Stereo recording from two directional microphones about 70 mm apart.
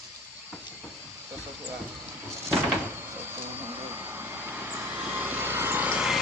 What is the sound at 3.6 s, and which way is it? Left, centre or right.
Vehicle, right.